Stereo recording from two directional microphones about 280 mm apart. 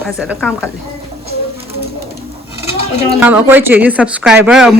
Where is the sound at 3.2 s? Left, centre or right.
Centre.